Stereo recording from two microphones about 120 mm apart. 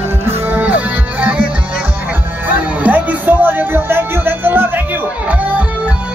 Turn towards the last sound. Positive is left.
turn(degrees=-15)  # may be behind; listen again after turning